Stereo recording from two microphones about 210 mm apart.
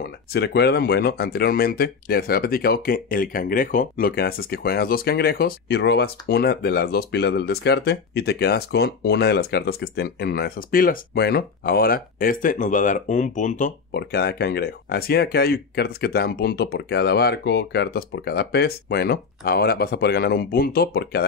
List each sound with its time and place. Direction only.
0.0 s speech: 50° left (ahead or behind)